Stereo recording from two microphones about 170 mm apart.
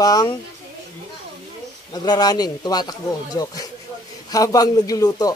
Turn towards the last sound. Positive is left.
turn(degrees=20)  # may be behind; listen again after turning